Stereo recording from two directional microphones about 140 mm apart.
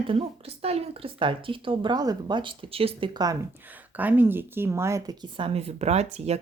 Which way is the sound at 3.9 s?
10° right (ahead or behind).